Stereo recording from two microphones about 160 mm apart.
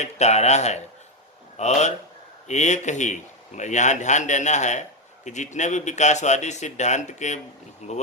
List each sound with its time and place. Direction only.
0.0 s speech: 45° left (ahead or behind)